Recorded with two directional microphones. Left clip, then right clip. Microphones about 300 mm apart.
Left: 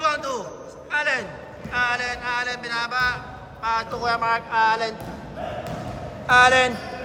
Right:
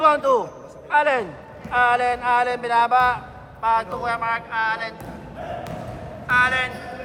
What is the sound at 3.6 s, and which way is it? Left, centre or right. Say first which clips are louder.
Speech: right 3 dB; centre.